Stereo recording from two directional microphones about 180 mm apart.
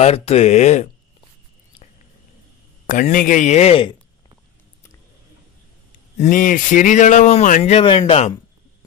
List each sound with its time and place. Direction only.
0.0 s speech: 35° left (ahead or behind)
2.9 s speech: 50° left (ahead or behind)
6.1 s speech: 45° left (ahead or behind); by 8.4 s 30° left (ahead or behind)